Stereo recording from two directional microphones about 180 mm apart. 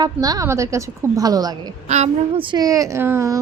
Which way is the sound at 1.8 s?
40° right (ahead or behind).